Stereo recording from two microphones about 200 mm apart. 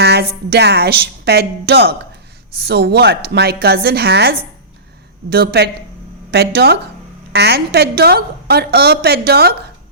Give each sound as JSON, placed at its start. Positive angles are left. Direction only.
{"t": 0.0, "sound": "a woman's voice", "side_deg": -55}